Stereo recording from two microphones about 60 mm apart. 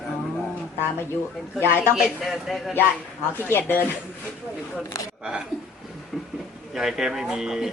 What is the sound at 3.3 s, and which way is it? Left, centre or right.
Speech, left.